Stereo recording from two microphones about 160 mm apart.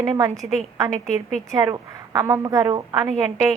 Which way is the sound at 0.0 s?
20° right (ahead or behind).